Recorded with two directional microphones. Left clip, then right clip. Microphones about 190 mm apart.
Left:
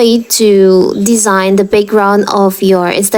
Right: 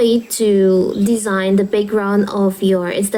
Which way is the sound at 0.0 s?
40° left (ahead or behind).